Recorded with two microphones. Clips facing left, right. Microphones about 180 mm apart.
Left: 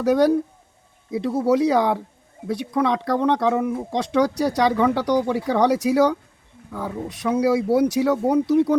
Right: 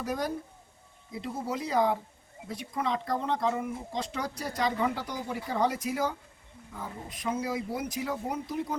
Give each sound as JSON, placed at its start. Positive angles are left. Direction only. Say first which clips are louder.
{"t": 0.0, "sound": "speech", "louder": "left 15 dB", "side_deg": 80}